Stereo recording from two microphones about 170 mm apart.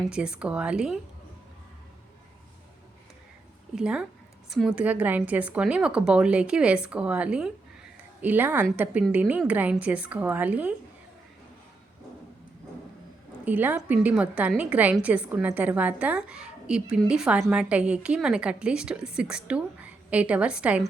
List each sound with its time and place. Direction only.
0.1 s speech: 5° right (ahead or behind)
3.8 s a woman's voice: 5° right (ahead or behind)
13.4 s a woman's voice: 10° right (ahead or behind)